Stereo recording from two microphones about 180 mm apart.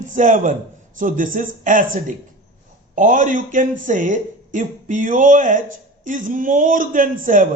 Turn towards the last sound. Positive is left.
turn(degrees=-45)  # may be behind; listen again after turning